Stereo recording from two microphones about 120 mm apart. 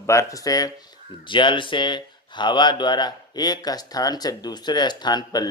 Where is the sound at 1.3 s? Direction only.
40° left (ahead or behind).